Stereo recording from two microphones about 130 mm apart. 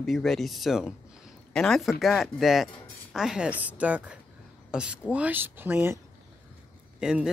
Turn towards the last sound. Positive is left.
turn(degrees=-5)  # may be behind; listen again after turning